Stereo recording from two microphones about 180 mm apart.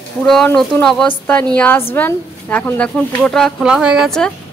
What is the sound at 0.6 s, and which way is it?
A woman's voice, 5° left (ahead or behind).